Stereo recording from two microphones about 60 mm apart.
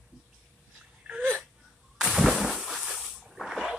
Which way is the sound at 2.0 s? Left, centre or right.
Centre.